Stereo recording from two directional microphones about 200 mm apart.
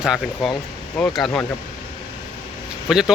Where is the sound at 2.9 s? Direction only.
Centre (ahead or behind).